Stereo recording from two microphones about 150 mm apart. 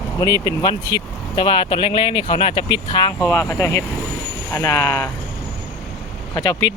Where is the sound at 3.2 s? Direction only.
15° left (ahead or behind).